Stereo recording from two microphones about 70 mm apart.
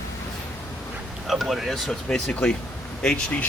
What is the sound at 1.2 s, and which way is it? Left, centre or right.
Speech, centre.